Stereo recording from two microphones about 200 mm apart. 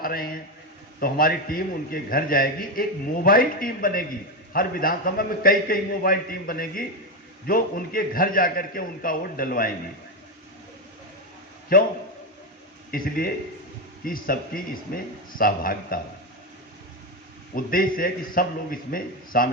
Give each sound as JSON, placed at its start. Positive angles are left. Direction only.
{"t": 0.0, "sound": "a man's voice", "side_deg": 45}
{"t": 11.7, "sound": "a man's voice", "side_deg": 45}
{"t": 12.9, "sound": "a man's voice", "side_deg": 45}
{"t": 17.5, "sound": "a man's voice", "side_deg": 45}